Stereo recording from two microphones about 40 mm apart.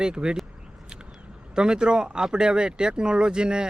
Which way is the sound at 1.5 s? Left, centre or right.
Right.